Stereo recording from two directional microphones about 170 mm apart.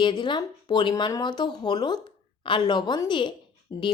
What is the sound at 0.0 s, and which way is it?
Speech, 25° left (ahead or behind).